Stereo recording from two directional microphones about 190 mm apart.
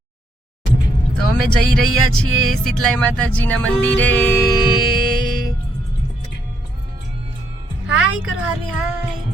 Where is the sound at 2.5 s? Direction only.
5° left (ahead or behind).